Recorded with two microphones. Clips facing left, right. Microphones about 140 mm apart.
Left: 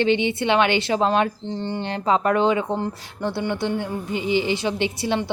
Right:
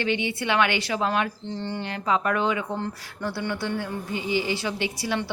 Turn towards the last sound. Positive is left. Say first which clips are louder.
# left 4 dB
turn(degrees=25)  # may be behind; listen again after turning